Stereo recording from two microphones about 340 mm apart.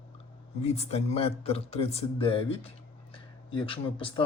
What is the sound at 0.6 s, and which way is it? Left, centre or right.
Speech, centre.